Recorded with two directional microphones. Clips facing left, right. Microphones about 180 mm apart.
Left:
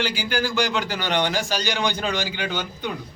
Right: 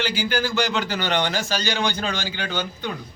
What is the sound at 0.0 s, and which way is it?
A man's voice, 10° left (ahead or behind).